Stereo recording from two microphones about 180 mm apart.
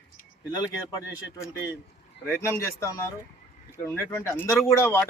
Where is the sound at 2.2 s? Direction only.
10° left (ahead or behind).